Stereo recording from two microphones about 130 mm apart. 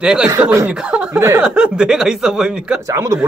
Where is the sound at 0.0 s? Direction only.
5° right (ahead or behind).